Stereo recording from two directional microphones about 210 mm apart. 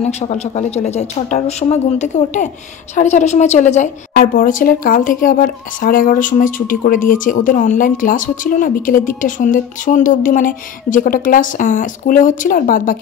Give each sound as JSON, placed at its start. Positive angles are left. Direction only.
{"t": 0.0, "sound": "a woman's voice", "side_deg": 30}